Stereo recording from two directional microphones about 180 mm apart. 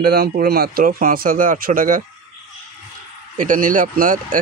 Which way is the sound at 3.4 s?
45° right (ahead or behind).